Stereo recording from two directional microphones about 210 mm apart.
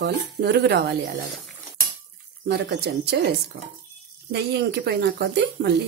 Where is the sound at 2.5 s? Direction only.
50° right (ahead or behind).